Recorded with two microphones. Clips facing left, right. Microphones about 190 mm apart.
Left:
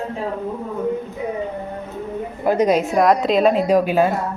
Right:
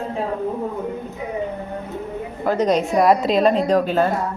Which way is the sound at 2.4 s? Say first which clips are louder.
Left 2 dB; 15° left (ahead or behind).